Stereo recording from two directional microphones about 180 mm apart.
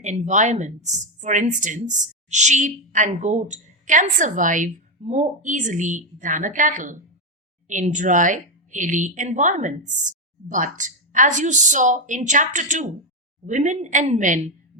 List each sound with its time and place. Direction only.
0.0 s speech: 40° right (ahead or behind)